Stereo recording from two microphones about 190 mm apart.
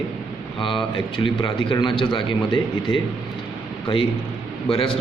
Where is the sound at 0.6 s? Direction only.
25° left (ahead or behind).